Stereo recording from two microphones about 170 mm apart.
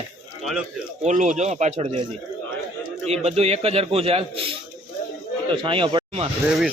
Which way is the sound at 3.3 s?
35° right (ahead or behind).